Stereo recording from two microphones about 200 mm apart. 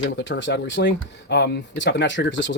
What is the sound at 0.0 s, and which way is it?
Speech, 65° left (ahead or behind).